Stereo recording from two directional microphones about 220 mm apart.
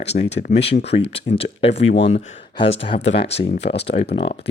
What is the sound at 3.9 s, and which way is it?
Speech, 25° left (ahead or behind).